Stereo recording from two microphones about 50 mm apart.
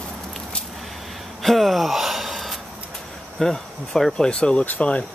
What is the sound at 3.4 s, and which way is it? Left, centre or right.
Speech, centre.